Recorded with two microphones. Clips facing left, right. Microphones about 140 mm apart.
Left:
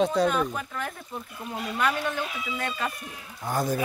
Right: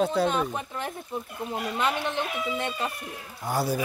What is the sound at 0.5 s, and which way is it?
Speech, 25° right (ahead or behind).